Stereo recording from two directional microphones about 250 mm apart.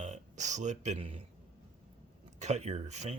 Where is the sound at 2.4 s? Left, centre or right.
Right.